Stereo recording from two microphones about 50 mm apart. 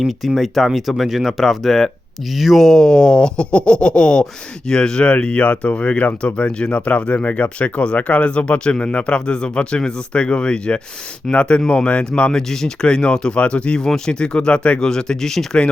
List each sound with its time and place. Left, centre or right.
0.0 s speech: centre
2.6 s speech: centre
12.3 s speech: centre